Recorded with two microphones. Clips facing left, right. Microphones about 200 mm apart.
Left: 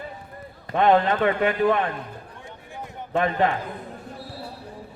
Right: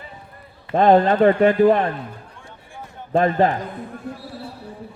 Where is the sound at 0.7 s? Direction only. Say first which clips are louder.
Right 4 dB; 35° right (ahead or behind).